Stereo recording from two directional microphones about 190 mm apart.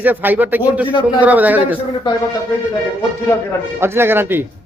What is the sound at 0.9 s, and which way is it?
Speech, 25° left (ahead or behind).